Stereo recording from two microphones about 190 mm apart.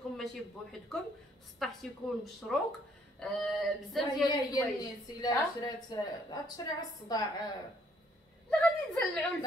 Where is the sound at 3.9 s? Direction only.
Centre (ahead or behind).